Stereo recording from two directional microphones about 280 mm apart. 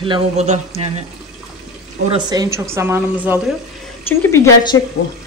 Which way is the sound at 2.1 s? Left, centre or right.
Centre.